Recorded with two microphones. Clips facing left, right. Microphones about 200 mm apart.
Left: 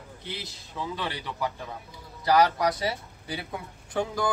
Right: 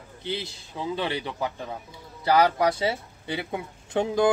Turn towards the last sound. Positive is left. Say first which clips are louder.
# right 6 dB
turn(degrees=-25)  # may be behind; listen again after turning